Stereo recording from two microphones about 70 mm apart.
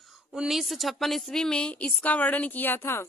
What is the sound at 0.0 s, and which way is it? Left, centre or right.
A woman's voice, centre.